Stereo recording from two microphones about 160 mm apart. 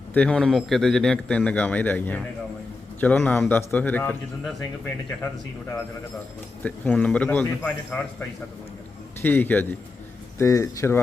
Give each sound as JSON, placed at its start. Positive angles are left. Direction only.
{"t": 0.1, "sound": "a man's voice", "side_deg": 5}
{"t": 6.6, "sound": "a man's voice", "side_deg": 10}
{"t": 9.2, "sound": "a man's voice", "side_deg": 10}